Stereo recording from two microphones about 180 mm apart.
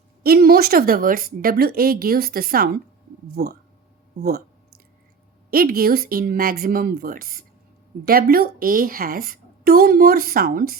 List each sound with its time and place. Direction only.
0.2 s a woman's voice: 60° right (ahead or behind)
5.5 s a woman's voice: 55° right (ahead or behind)